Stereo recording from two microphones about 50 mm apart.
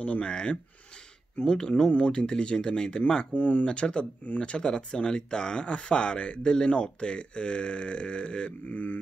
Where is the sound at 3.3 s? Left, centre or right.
Left.